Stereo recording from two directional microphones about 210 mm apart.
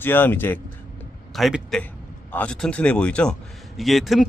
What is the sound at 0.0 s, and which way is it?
Speech, 10° left (ahead or behind).